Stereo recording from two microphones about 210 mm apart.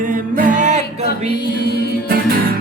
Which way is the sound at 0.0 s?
40° right (ahead or behind).